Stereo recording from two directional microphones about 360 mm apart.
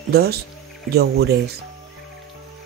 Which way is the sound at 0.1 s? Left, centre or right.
Right.